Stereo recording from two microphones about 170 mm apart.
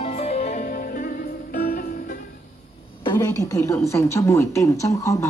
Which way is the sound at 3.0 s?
25° left (ahead or behind).